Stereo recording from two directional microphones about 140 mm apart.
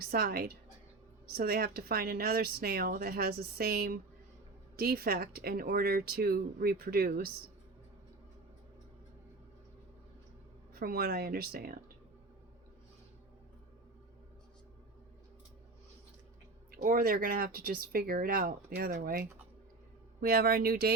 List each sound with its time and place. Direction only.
0.0 s a woman's voice: 90° right
10.8 s a woman's voice: 90° right
16.7 s a woman's voice: 90° right